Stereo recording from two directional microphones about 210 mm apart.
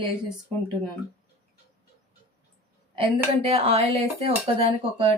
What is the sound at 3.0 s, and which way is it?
Speech, 25° right (ahead or behind).